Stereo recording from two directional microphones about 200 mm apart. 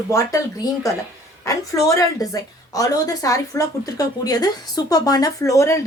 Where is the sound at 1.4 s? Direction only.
15° left (ahead or behind).